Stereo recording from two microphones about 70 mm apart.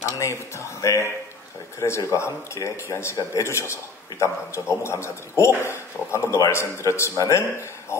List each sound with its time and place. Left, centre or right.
0.2 s a man's voice: left
7.9 s hoot: left